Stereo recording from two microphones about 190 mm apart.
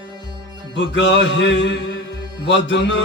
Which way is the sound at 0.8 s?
70° left (ahead or behind).